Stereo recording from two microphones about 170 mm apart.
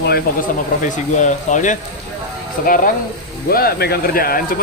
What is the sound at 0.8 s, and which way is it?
A man's voice, 45° left (ahead or behind).